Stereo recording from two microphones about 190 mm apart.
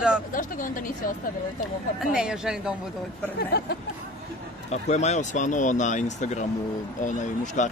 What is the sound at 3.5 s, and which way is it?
Speech, 55° left (ahead or behind).